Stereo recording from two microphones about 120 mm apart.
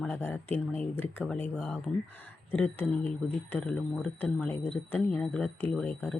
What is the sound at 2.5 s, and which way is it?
Speech, 15° left (ahead or behind).